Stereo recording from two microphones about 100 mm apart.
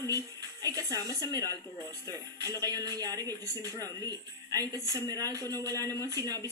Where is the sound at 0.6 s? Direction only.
35° right (ahead or behind).